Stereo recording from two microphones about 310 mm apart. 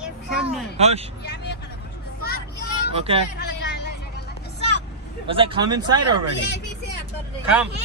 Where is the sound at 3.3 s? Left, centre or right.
Left.